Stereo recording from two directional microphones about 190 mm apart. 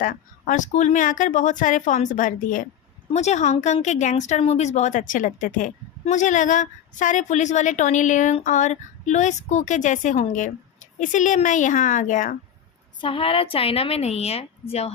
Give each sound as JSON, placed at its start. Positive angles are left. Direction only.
{"t": 0.0, "sound": "a woman's voice", "side_deg": 45}
{"t": 13.0, "sound": "a woman's voice", "side_deg": 30}